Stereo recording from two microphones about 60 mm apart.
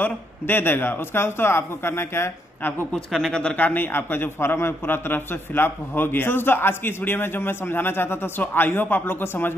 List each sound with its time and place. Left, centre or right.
0.0 s a man's voice: left
2.9 s speech: centre
3.5 s a man's voice: left